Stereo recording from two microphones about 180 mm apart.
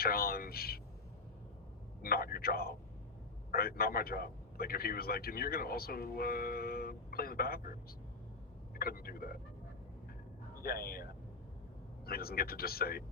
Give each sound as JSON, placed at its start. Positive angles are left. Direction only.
{"t": 0.0, "sound": "a sound", "side_deg": 55}
{"t": 2.0, "sound": "a man's voice", "side_deg": 55}
{"t": 8.7, "sound": "a man's voice", "side_deg": 55}
{"t": 10.6, "sound": "speech", "side_deg": 55}
{"t": 12.0, "sound": "a man's voice", "side_deg": 60}